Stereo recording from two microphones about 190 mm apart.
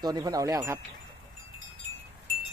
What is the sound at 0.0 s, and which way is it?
Speech, 20° right (ahead or behind).